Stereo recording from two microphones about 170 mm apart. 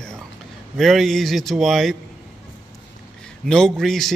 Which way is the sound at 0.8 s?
Centre (ahead or behind).